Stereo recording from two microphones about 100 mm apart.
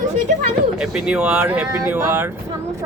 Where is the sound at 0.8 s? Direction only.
5° right (ahead or behind).